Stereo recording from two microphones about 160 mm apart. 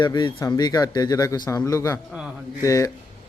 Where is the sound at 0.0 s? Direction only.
30° left (ahead or behind).